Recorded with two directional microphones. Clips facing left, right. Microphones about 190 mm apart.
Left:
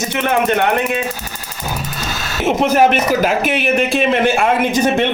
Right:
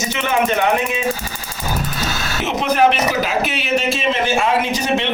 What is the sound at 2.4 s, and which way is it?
Speech, 50° left (ahead or behind).